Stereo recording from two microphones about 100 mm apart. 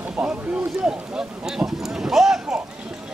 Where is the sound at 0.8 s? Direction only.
5° right (ahead or behind).